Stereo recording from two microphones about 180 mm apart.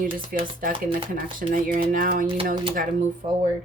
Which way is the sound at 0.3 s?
55° right (ahead or behind).